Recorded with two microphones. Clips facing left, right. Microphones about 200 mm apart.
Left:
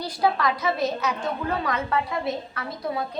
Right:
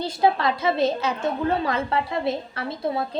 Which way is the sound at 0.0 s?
25° right (ahead or behind).